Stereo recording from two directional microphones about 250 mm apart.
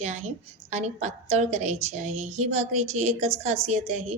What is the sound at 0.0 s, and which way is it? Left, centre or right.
A woman's voice, right.